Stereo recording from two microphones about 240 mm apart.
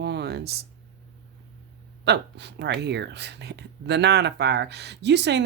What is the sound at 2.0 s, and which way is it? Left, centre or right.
Speech, right.